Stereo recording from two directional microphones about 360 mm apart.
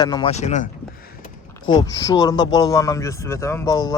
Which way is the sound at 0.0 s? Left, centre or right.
Centre.